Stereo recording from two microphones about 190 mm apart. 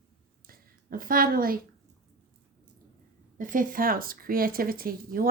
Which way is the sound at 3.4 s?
45° right (ahead or behind).